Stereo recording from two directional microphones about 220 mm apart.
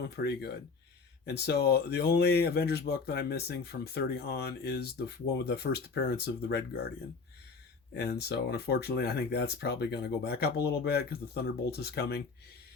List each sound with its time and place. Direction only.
0.2 s speech: 45° left (ahead or behind)
7.9 s speech: 45° left (ahead or behind)